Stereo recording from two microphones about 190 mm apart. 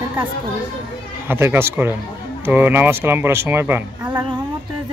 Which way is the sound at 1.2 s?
10° right (ahead or behind).